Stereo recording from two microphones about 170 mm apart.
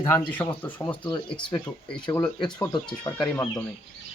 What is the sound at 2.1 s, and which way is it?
Speech, 25° left (ahead or behind).